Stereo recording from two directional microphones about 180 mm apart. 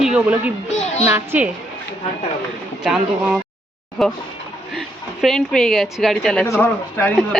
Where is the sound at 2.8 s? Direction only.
5° right (ahead or behind).